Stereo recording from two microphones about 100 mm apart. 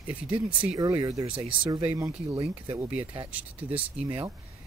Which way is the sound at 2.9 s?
65° right (ahead or behind).